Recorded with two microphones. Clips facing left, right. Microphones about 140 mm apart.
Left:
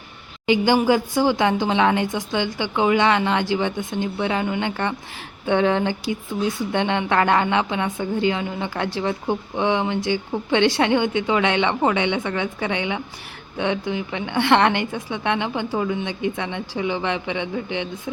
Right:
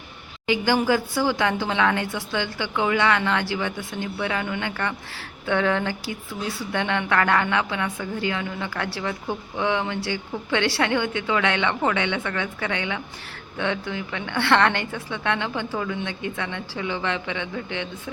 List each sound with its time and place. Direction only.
0.4 s a woman's voice: 20° left (ahead or behind)